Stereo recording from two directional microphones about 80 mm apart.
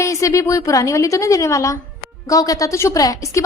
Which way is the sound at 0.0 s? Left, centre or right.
Left.